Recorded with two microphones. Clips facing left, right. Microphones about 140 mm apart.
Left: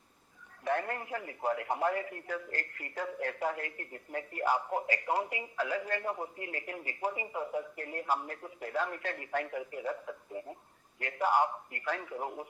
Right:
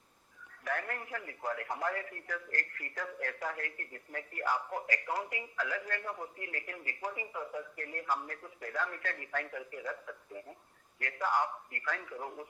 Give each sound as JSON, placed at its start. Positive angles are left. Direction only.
{"t": 0.6, "sound": "speech", "side_deg": 25}